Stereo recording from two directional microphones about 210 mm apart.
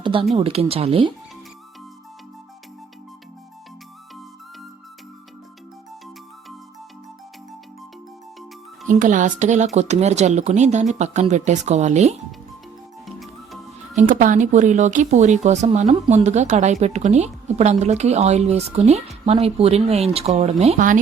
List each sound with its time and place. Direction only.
0.0 s speech: 25° right (ahead or behind)
8.9 s speech: 40° right (ahead or behind)
13.1 s music: centre (ahead or behind)
13.9 s speech: 40° right (ahead or behind)